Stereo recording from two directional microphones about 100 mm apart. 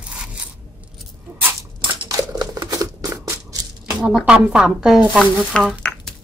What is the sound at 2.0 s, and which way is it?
Crumpling, 40° right (ahead or behind).